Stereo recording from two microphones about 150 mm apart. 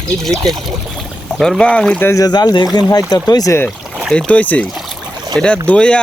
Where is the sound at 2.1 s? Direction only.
25° left (ahead or behind).